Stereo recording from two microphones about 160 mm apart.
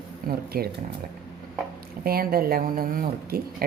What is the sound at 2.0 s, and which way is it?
Speech, 70° right (ahead or behind).